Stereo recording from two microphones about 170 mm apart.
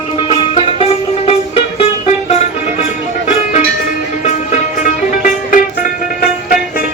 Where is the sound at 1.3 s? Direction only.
35° left (ahead or behind).